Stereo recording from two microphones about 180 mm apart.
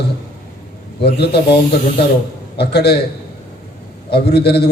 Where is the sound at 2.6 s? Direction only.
65° left (ahead or behind).